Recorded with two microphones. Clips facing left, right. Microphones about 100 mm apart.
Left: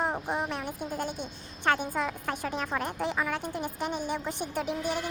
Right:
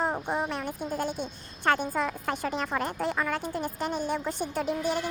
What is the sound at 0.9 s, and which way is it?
Speech, 10° right (ahead or behind).